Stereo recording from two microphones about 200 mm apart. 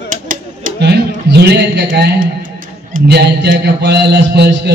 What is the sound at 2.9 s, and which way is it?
A man's voice, 55° right (ahead or behind).